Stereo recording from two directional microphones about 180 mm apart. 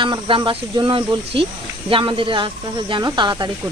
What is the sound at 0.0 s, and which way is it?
Speech, 30° right (ahead or behind).